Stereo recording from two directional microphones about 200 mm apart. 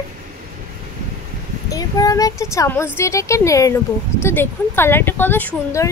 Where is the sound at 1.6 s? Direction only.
20° left (ahead or behind).